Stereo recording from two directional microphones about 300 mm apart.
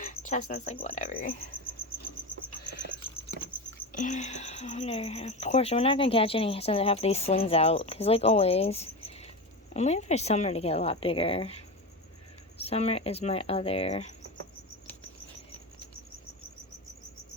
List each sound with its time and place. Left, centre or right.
0.3 s speech: left
3.9 s speech: left